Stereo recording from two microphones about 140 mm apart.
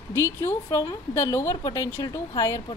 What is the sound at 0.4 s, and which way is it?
A woman's voice, 20° left (ahead or behind).